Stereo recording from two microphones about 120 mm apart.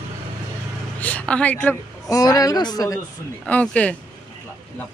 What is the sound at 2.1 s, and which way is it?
Speech, 30° left (ahead or behind).